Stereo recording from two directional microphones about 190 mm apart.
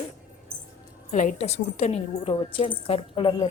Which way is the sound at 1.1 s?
40° left (ahead or behind).